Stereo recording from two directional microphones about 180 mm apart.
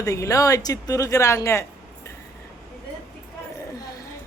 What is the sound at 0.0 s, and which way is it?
A woman's voice, 20° left (ahead or behind).